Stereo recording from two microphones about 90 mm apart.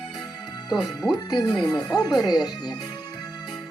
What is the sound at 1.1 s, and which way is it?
Speech, 50° left (ahead or behind).